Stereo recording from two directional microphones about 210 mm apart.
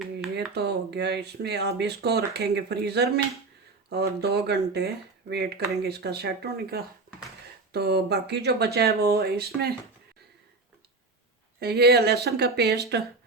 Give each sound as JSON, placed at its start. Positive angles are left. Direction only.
{"t": 0.5, "sound": "speech", "side_deg": -50}
{"t": 11.6, "sound": "speech", "side_deg": -50}